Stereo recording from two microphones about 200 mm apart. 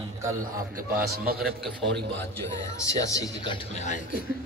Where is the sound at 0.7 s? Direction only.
45° right (ahead or behind).